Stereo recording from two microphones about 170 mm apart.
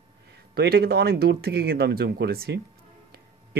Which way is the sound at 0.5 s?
65° right (ahead or behind).